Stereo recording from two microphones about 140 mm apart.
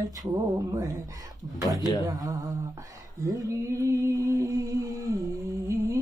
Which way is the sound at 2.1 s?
30° right (ahead or behind).